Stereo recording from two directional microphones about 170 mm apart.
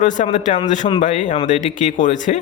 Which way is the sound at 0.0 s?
45° left (ahead or behind).